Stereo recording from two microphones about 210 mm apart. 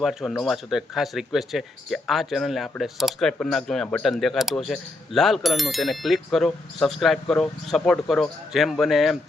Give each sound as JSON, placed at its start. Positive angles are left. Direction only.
{"t": 0.0, "sound": "speech", "side_deg": 0}